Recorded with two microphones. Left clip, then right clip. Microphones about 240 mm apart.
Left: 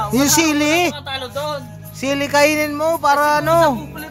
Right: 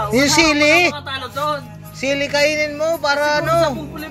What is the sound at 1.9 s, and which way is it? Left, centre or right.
Speech, left.